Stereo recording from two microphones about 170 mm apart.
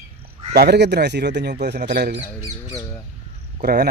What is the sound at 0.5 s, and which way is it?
Speech, 75° right (ahead or behind).